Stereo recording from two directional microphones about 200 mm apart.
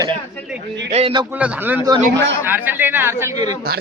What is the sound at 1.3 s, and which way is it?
Speech, 10° right (ahead or behind).